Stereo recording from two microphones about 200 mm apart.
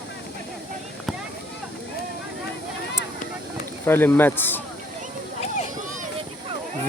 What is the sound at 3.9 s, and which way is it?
Speech, 10° left (ahead or behind).